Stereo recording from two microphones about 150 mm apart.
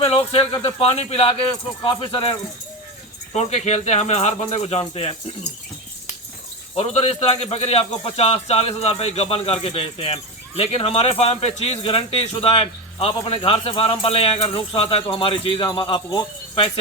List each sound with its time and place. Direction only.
0.0 s speech: 40° left (ahead or behind)
3.3 s speech: 45° left (ahead or behind)
6.7 s speech: 45° left (ahead or behind)